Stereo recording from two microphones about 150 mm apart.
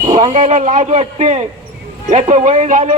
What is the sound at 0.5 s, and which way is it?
Speech, 50° right (ahead or behind).